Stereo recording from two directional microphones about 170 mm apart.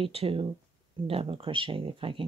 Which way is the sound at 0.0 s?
35° right (ahead or behind).